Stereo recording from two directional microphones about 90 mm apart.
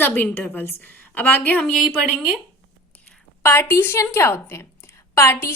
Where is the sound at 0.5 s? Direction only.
20° left (ahead or behind).